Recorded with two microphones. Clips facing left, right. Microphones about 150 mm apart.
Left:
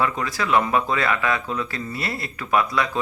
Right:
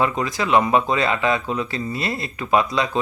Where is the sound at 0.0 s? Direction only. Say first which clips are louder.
Right 2 dB; 20° right (ahead or behind).